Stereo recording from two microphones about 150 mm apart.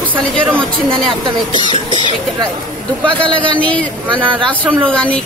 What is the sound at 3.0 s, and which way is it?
Speech, 35° right (ahead or behind).